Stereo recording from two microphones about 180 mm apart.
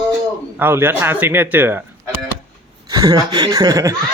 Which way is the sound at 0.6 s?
10° right (ahead or behind).